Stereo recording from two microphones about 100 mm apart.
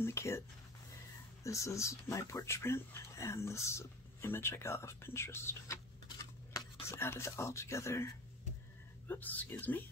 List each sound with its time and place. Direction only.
0.0 s speech: 25° left (ahead or behind)
1.4 s speech: 30° left (ahead or behind)
6.1 s a sound: 35° left (ahead or behind)
9.0 s speech: 15° left (ahead or behind)